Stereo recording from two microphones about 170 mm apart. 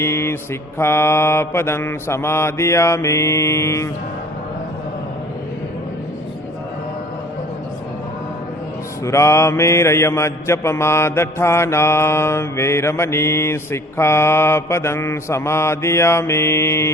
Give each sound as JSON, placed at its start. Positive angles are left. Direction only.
{"t": 0.0, "sound": "mantra", "side_deg": 15}
{"t": 9.0, "sound": "mantra", "side_deg": 15}